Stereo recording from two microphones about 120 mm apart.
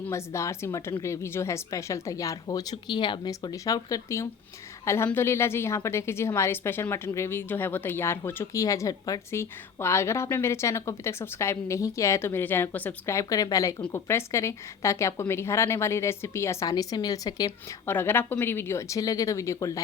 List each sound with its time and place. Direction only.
0.1 s a woman's voice: 25° left (ahead or behind)
13.1 s a woman's voice: 30° left (ahead or behind)
17.8 s a woman's voice: 20° left (ahead or behind)